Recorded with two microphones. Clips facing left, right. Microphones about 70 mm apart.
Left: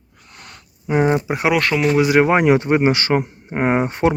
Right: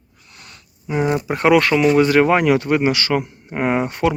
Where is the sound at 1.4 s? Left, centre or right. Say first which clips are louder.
Right 8 dB; centre.